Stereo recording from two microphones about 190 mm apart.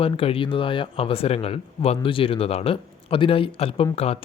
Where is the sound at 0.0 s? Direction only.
30° left (ahead or behind).